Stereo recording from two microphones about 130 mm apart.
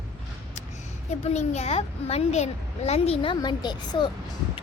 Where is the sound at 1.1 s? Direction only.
60° left (ahead or behind).